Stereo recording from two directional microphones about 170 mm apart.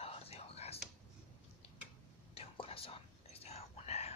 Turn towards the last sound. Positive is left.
turn(degrees=40)  # may be behind; listen again after turning